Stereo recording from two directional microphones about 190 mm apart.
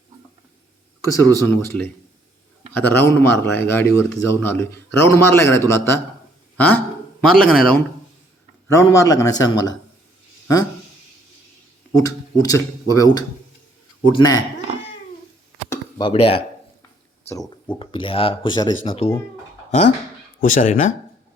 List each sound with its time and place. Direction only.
1.0 s speech: 15° left (ahead or behind)
2.7 s speech: 10° left (ahead or behind)
8.6 s speech: 15° left (ahead or behind)
11.9 s speech: 20° left (ahead or behind)
15.7 s a sound: 25° left (ahead or behind)
17.7 s speech: 30° left (ahead or behind)
20.4 s speech: 45° left (ahead or behind)